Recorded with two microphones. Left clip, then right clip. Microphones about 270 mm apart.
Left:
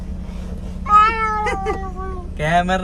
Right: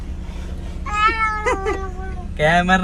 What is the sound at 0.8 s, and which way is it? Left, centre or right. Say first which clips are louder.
Cat: left 5 dB; left.